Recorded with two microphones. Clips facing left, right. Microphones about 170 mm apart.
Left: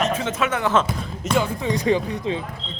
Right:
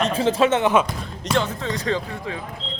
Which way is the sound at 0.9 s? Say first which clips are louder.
Left 2 dB; 10° left (ahead or behind).